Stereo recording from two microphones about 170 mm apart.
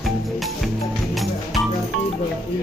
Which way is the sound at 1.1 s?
Centre (ahead or behind).